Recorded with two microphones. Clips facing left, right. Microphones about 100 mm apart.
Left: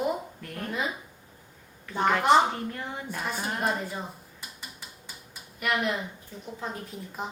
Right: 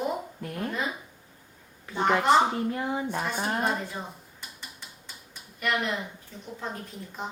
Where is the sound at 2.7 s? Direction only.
20° right (ahead or behind).